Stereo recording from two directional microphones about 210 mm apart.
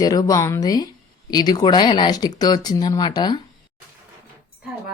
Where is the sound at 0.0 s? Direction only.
20° left (ahead or behind).